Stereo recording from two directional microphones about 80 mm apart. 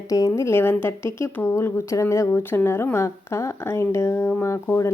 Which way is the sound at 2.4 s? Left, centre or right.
Left.